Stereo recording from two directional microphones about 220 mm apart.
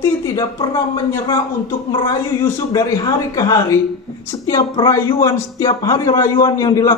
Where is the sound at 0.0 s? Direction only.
15° left (ahead or behind).